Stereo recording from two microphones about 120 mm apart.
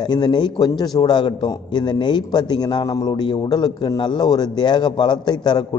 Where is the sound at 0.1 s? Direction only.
35° left (ahead or behind).